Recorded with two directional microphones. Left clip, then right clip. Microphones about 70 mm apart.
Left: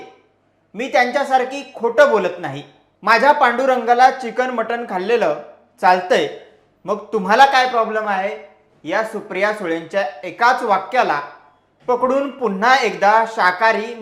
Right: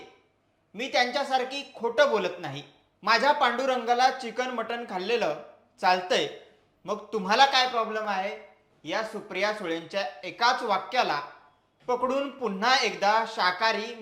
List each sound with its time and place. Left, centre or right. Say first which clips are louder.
0.8 s speech: left 9 dB; left